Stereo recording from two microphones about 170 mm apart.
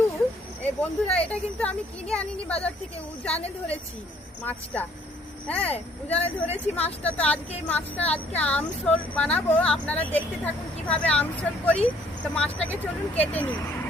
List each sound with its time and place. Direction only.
0.8 s speech: 5° left (ahead or behind)
4.4 s speech: 10° left (ahead or behind)
6.1 s speech: 40° left (ahead or behind)
6.8 s speech: 10° left (ahead or behind)